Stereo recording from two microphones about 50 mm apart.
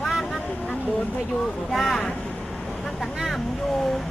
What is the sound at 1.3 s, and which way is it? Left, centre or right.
Speech, centre.